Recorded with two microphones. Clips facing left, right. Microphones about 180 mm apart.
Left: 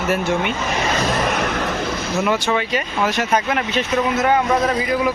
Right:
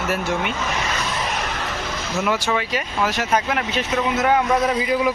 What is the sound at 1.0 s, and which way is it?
Vehicle, 55° left (ahead or behind).